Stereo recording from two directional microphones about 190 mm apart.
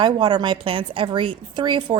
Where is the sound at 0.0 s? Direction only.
25° right (ahead or behind).